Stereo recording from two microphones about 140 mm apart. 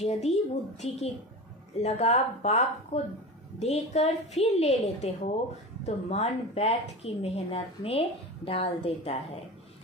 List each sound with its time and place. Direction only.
0.0 s a woman's voice: 50° left (ahead or behind)